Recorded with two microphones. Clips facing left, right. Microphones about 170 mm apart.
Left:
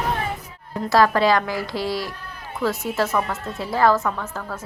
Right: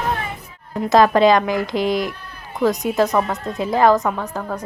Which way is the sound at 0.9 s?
20° right (ahead or behind).